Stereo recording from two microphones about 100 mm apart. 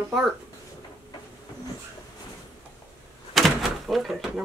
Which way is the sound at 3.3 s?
Centre (ahead or behind).